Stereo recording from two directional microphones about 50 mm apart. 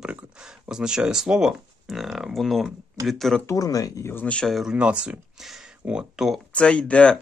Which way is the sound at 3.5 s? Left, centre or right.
Left.